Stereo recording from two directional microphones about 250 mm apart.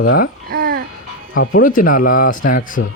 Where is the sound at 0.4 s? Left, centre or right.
Right.